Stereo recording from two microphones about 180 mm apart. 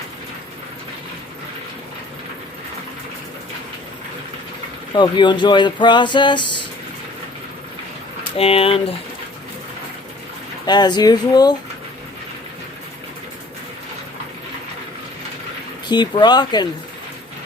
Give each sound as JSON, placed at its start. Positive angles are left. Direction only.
{"t": 4.9, "sound": "speech", "side_deg": 25}
{"t": 8.4, "sound": "speech", "side_deg": 35}
{"t": 10.7, "sound": "speech", "side_deg": 25}
{"t": 15.9, "sound": "speech", "side_deg": 25}